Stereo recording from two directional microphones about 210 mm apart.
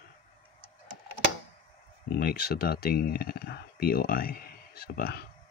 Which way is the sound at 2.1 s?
45° left (ahead or behind).